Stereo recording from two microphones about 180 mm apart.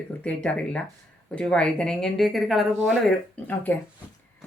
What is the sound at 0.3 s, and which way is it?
A woman's voice, 5° left (ahead or behind).